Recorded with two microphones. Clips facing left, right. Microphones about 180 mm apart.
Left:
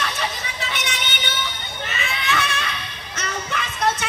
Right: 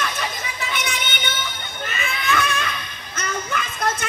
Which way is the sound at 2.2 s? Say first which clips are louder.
Right 3 dB; 45° right (ahead or behind).